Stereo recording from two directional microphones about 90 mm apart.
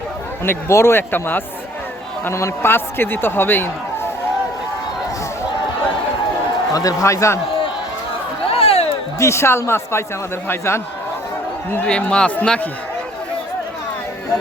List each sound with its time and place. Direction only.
0.4 s a man's voice: 30° left (ahead or behind)
6.7 s speech: 40° left (ahead or behind)
8.4 s a sound: 90° left
9.1 s speech: 30° left (ahead or behind)
11.9 s a man's voice: 10° left (ahead or behind)